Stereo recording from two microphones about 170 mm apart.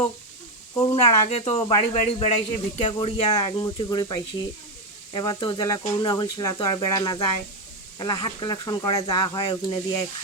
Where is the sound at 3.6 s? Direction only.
25° left (ahead or behind).